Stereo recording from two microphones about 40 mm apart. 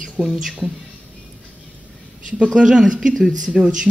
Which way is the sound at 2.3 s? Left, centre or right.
Right.